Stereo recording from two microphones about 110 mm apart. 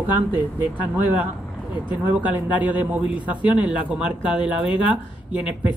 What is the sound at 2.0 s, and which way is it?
Speech, 15° right (ahead or behind).